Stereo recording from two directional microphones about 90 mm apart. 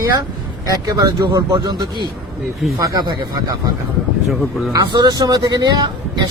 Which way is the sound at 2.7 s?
40° right (ahead or behind).